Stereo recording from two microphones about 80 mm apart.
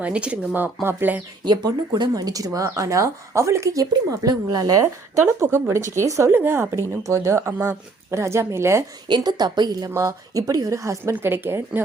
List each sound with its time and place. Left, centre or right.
0.0 s speech: centre
0.5 s speech: right
1.5 s speech: right
5.4 s speech: right
9.0 s speech: right
9.9 s speech: right
11.1 s speech: right